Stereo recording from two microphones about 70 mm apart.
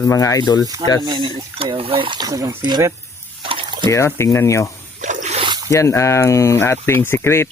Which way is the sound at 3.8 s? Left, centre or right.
Left.